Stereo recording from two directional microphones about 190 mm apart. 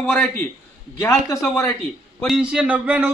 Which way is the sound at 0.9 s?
15° left (ahead or behind).